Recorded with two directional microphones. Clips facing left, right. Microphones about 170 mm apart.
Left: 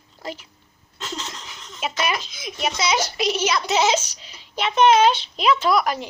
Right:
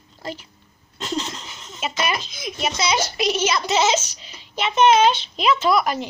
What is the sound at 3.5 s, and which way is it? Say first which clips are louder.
Speech: even; centre (ahead or behind).